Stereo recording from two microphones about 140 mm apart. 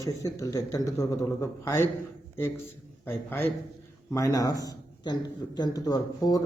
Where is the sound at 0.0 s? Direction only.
25° left (ahead or behind).